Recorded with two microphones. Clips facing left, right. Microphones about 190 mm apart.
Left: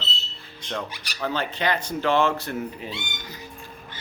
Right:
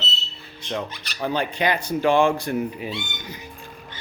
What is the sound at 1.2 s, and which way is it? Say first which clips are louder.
Speech: right 3 dB; 15° right (ahead or behind).